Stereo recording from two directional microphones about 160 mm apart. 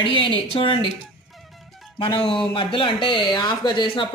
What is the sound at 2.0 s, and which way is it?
A woman's voice, 35° left (ahead or behind).